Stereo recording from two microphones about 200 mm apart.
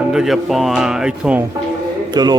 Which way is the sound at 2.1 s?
20° right (ahead or behind).